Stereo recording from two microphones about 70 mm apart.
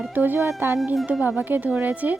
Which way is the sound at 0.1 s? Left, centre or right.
Right.